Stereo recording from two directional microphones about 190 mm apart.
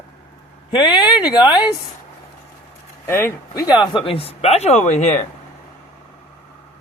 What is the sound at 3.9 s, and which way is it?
Speech, 30° left (ahead or behind).